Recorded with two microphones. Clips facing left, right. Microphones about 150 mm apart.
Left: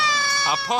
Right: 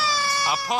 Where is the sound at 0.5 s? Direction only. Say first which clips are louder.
Left 4 dB; 10° right (ahead or behind).